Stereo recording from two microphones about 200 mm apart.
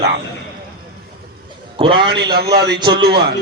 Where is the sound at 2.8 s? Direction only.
25° right (ahead or behind).